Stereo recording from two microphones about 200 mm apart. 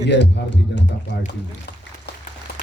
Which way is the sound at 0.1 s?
60° left (ahead or behind).